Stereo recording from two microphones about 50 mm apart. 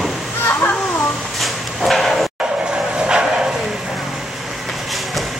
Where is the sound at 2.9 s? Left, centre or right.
Centre.